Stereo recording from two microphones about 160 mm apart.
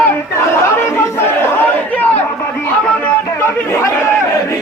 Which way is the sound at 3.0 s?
15° left (ahead or behind).